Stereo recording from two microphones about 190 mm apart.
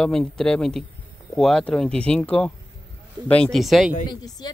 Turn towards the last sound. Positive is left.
turn(degrees=20)  # may be behind; listen again after turning